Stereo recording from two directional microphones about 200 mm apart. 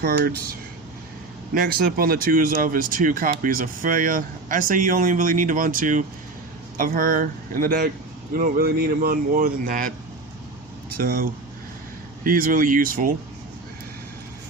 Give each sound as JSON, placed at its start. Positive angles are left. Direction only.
{"t": 0.0, "sound": "speech", "side_deg": -50}
{"t": 1.5, "sound": "speech", "side_deg": -45}
{"t": 10.9, "sound": "speech", "side_deg": -45}